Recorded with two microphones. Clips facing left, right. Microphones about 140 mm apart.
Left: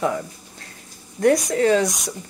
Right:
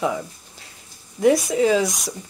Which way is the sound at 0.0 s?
5° right (ahead or behind).